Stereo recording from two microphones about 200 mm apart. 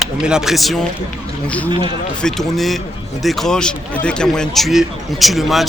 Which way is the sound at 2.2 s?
5° left (ahead or behind).